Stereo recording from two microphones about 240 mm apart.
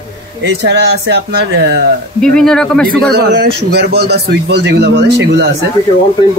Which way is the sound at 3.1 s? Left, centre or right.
Right.